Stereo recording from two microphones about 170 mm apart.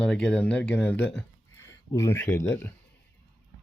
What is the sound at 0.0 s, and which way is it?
Speech, 5° left (ahead or behind).